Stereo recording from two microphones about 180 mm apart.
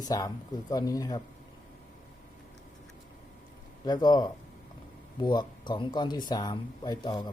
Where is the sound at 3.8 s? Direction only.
25° left (ahead or behind).